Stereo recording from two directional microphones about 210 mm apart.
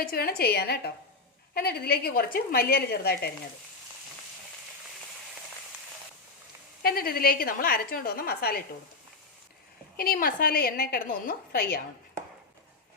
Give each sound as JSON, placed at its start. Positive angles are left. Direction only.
{"t": 0.0, "sound": "a woman's voice", "side_deg": 45}
{"t": 6.8, "sound": "a woman's voice", "side_deg": 45}
{"t": 10.0, "sound": "a woman's voice", "side_deg": 45}